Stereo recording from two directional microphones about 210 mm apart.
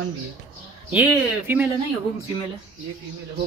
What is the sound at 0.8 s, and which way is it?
Speech, 5° right (ahead or behind).